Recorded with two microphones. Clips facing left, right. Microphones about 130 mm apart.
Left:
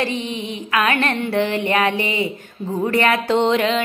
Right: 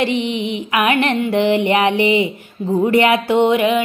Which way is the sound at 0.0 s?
15° right (ahead or behind).